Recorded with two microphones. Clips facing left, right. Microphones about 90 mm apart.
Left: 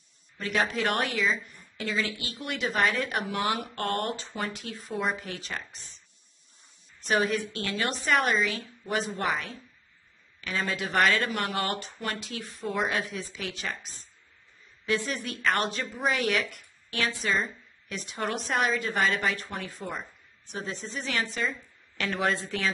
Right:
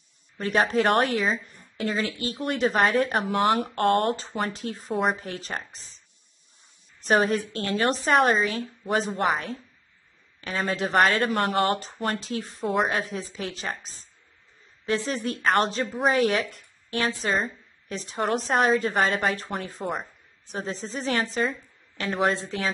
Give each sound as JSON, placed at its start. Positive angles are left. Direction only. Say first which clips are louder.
{"t": 0.4, "sound": "speech", "louder": "right 5 dB", "side_deg": -40}
{"t": 7.1, "sound": "speech", "louder": "right 4 dB", "side_deg": -35}
{"t": 10.7, "sound": "a woman's voice", "louder": "right 4 dB", "side_deg": -30}
{"t": 11.2, "sound": "a woman's voice", "louder": "right 7 dB", "side_deg": -45}
{"t": 19.0, "sound": "a woman's voice", "louder": "right 3 dB", "side_deg": -45}